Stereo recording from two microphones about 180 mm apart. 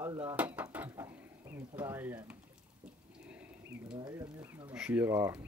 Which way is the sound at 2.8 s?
5° right (ahead or behind).